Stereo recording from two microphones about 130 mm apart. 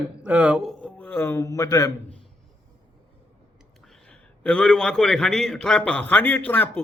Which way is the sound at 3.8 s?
Centre (ahead or behind).